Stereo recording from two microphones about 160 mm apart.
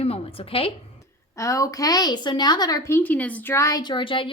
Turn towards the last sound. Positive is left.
turn(degrees=30)  # may be behind; listen again after turning